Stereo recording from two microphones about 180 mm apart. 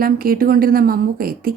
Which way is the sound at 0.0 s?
55° right (ahead or behind).